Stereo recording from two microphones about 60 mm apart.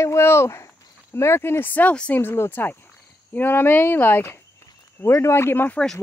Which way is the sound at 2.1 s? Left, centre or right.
Left.